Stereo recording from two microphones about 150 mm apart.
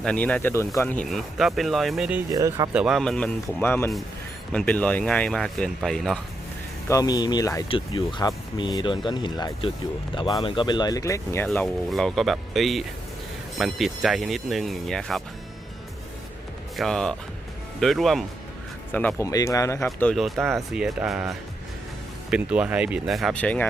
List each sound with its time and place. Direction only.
0.0 s speech: 5° left (ahead or behind)
1.1 s speech: centre (ahead or behind)
2.3 s speech: 25° right (ahead or behind)
2.7 s speech: centre (ahead or behind)
6.8 s speech: 25° left (ahead or behind)
7.7 s speech: 35° left (ahead or behind); by 11.4 s 20° left (ahead or behind)
11.4 s speech: centre (ahead or behind)
16.7 s speech: 5° left (ahead or behind)
18.9 s speech: 10° left (ahead or behind)
19.3 s speech: 25° left (ahead or behind)
20.1 s speech: centre (ahead or behind)
23.4 s speech: 10° left (ahead or behind)